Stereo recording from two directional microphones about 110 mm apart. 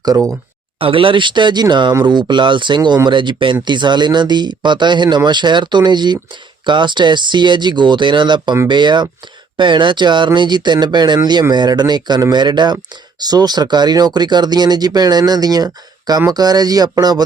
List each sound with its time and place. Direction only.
0.8 s speech: 55° right (ahead or behind); by 17.2 s 35° right (ahead or behind)